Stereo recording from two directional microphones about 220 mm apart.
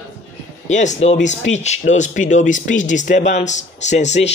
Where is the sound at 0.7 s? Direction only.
35° left (ahead or behind).